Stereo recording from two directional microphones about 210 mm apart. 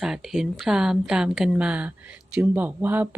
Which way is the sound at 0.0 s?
Centre (ahead or behind).